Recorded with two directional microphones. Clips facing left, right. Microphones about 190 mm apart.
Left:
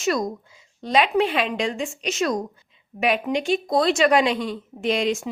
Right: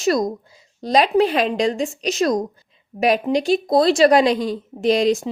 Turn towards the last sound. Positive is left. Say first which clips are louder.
# right 6 dB
turn(degrees=-35)  # may be behind; listen again after turning